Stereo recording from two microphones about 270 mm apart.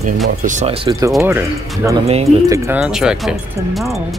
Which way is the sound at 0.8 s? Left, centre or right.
Centre.